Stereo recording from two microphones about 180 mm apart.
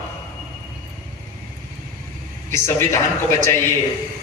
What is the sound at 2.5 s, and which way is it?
Speech, 15° left (ahead or behind).